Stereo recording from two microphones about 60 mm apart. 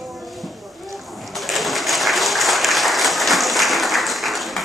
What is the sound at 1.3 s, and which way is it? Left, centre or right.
Applause, centre.